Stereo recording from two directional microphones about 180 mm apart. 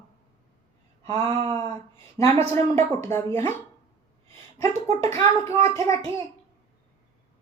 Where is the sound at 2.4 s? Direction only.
40° right (ahead or behind).